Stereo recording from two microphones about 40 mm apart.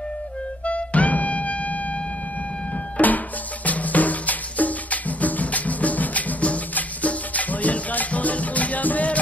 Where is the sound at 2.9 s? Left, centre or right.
Left.